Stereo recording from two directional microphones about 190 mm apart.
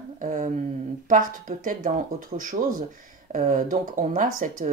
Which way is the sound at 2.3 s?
35° right (ahead or behind).